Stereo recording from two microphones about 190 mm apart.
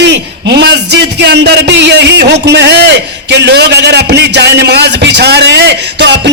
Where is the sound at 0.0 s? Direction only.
65° right (ahead or behind).